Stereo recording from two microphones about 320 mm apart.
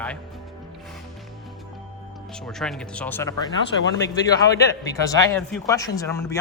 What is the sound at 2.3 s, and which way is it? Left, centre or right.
A man's voice, centre.